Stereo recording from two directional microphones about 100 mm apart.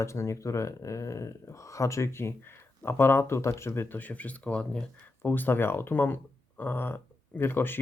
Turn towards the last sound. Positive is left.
turn(degrees=20)  # may be behind; listen again after turning